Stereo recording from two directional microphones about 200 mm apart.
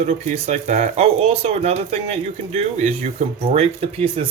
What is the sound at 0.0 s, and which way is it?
Speech, 30° right (ahead or behind).